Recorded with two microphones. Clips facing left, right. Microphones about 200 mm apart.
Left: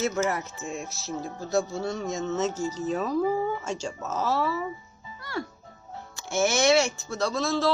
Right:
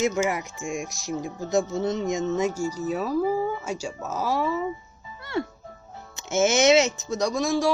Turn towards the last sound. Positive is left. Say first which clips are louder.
# right 2 dB
turn(degrees=-15)  # may be behind; listen again after turning